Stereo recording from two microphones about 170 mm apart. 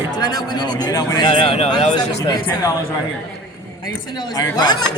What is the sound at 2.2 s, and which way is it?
Speech, 20° left (ahead or behind).